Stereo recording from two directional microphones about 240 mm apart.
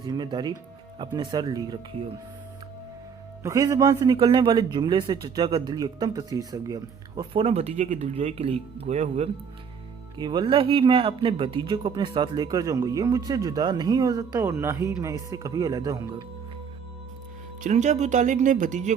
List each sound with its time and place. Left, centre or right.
0.0 s speech: centre
3.4 s speech: centre
17.6 s speech: right